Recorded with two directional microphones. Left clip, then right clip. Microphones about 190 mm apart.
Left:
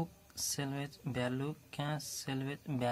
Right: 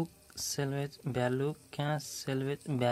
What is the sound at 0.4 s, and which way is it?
Speech, 30° right (ahead or behind).